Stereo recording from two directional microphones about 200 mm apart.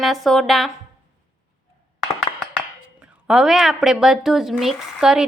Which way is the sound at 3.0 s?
5° right (ahead or behind).